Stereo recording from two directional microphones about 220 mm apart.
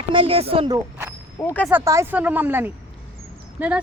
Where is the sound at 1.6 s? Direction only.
10° right (ahead or behind).